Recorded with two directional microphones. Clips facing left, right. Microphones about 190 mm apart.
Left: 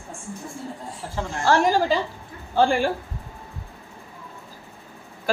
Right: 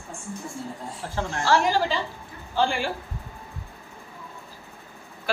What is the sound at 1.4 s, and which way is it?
A woman's voice, 50° left (ahead or behind).